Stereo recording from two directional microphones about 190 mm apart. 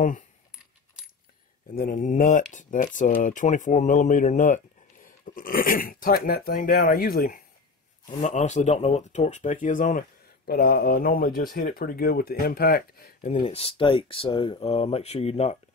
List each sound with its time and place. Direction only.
1.8 s speech: 45° left (ahead or behind)
13.4 s speech: 30° left (ahead or behind)